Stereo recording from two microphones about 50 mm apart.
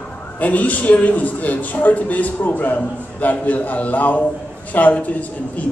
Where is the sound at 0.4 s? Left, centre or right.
Left.